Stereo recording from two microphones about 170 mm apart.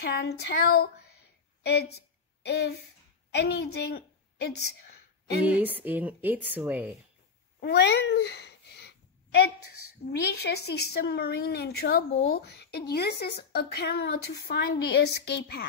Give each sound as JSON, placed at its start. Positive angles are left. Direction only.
{"t": 0.0, "sound": "a woman's voice", "side_deg": 75}
{"t": 5.4, "sound": "a woman's voice", "side_deg": -10}
{"t": 7.6, "sound": "cat", "side_deg": 85}
{"t": 10.0, "sound": "a woman's voice", "side_deg": 70}